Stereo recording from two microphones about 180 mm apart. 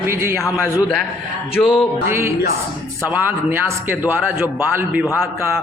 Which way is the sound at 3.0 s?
10° right (ahead or behind).